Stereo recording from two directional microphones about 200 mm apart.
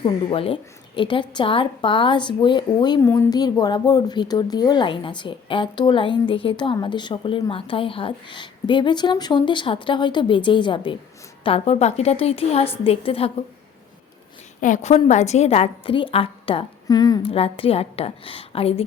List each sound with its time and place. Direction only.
0.0 s a woman's voice: 25° left (ahead or behind)
14.6 s a woman's voice: 35° left (ahead or behind)